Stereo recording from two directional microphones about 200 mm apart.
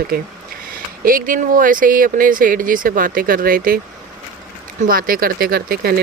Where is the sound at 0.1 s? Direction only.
50° right (ahead or behind).